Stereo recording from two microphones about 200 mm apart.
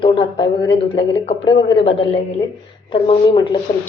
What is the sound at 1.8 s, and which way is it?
Speech, 25° left (ahead or behind).